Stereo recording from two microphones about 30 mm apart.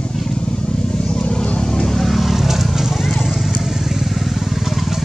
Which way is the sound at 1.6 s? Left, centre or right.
Centre.